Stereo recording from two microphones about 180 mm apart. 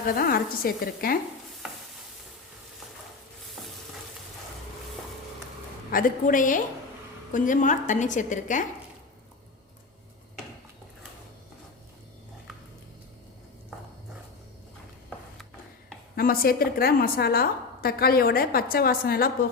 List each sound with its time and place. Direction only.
0.0 s a woman's voice: 55° left (ahead or behind)
5.9 s a woman's voice: 50° left (ahead or behind)
16.1 s a woman's voice: 55° left (ahead or behind)